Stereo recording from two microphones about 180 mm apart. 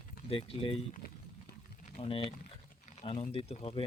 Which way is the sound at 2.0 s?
30° left (ahead or behind).